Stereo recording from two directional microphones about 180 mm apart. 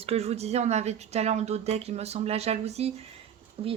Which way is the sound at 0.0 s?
35° right (ahead or behind).